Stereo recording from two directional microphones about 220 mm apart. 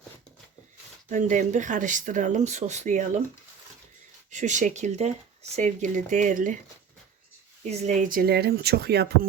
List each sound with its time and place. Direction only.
1.1 s speech: 35° right (ahead or behind)
4.3 s speech: 35° right (ahead or behind)
7.6 s speech: 30° right (ahead or behind); by 9.1 s 45° right (ahead or behind)